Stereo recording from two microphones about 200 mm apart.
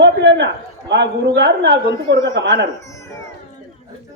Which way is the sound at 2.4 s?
55° right (ahead or behind).